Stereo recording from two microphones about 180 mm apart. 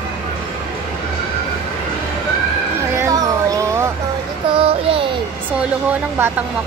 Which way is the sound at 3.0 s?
15° right (ahead or behind).